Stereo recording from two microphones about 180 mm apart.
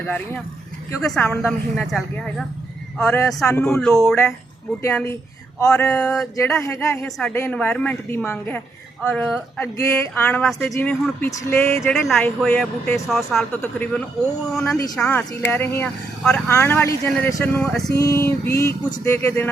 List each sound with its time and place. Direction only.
0.0 s speech: 10° left (ahead or behind)
11.8 s speech: 5° left (ahead or behind)